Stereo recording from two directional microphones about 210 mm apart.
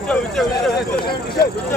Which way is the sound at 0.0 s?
Centre (ahead or behind).